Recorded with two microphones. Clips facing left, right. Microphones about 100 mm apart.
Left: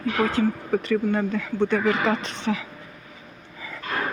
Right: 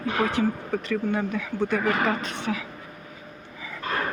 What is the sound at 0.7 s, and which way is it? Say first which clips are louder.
Speech: left 4 dB; centre (ahead or behind).